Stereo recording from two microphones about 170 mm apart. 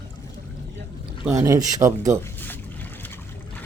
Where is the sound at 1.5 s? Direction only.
20° right (ahead or behind).